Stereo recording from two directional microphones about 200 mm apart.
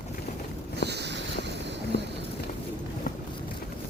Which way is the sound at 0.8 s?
55° right (ahead or behind).